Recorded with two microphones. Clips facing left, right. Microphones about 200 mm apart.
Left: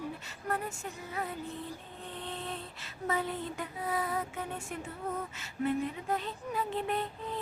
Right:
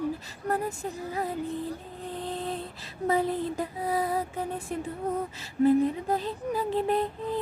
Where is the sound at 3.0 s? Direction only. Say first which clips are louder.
Right 7 dB; 35° right (ahead or behind).